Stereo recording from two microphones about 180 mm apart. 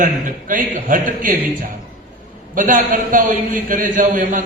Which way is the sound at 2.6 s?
45° right (ahead or behind).